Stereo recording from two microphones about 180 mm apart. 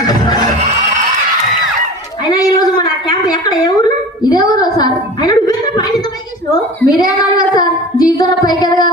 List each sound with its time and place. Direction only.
0.1 s music: 25° left (ahead or behind)
2.3 s a sound: 20° left (ahead or behind)
6.8 s child singing: 20° left (ahead or behind)
8.2 s music: 20° left (ahead or behind)